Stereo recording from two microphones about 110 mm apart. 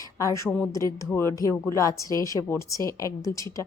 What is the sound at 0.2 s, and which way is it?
A woman's voice, 30° left (ahead or behind).